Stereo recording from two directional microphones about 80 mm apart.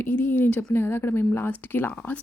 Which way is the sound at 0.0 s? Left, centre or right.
Left.